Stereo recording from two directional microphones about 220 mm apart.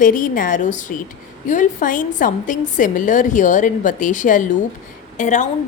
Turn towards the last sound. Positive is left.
turn(degrees=35)  # may be behind; listen again after turning